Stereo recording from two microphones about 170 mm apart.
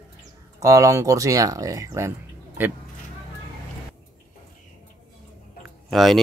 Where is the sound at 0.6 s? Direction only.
20° right (ahead or behind).